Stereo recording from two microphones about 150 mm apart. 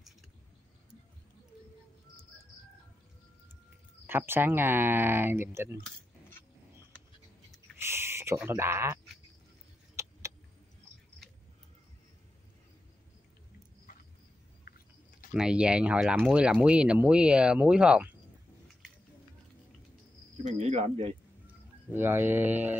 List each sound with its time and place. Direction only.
4.1 s speech: 15° right (ahead or behind)
7.7 s a sound: 15° right (ahead or behind)
8.5 s speech: 15° right (ahead or behind)
10.0 s vehicle: 20° right (ahead or behind)
14.7 s chewing: 90° left
15.3 s speech: 5° right (ahead or behind)
20.4 s speech: 45° right (ahead or behind)
21.9 s speech: 15° right (ahead or behind)